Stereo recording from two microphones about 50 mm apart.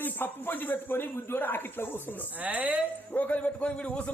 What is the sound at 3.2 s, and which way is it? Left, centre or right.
Speech, left.